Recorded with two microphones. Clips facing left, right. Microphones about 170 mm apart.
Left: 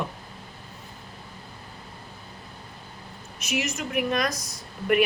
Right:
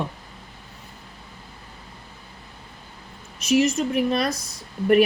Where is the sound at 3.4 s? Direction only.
30° right (ahead or behind).